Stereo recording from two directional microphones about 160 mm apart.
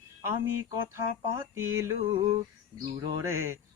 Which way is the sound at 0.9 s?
15° right (ahead or behind).